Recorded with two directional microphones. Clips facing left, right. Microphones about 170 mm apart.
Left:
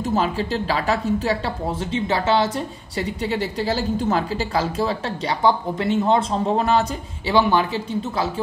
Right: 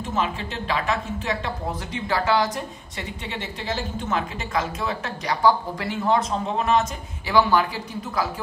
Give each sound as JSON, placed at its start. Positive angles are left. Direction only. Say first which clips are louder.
{"t": 0.0, "sound": "speech", "louder": "left 5 dB", "side_deg": 35}
{"t": 7.3, "sound": "speech", "louder": "left 1 dB", "side_deg": 20}